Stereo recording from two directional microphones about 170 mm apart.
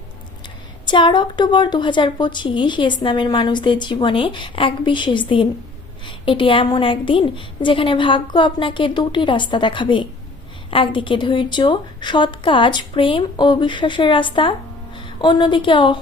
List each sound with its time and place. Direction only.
0.4 s a woman's voice: 30° left (ahead or behind)